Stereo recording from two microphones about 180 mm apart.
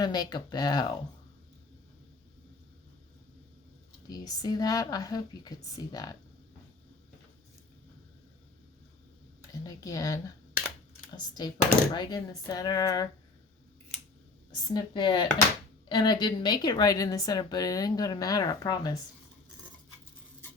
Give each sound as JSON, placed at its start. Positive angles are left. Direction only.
{"t": 0.0, "sound": "speech", "side_deg": 25}
{"t": 4.1, "sound": "speech", "side_deg": 20}
{"t": 9.5, "sound": "speech", "side_deg": 20}
{"t": 14.7, "sound": "speech", "side_deg": 25}